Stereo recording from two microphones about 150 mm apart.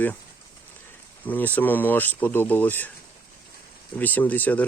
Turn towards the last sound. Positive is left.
turn(degrees=10)  # may be behind; listen again after turning